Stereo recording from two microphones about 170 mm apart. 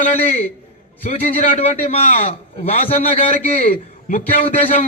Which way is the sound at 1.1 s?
35° left (ahead or behind).